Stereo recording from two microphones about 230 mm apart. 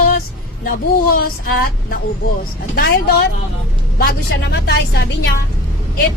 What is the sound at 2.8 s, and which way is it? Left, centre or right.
Speech, left.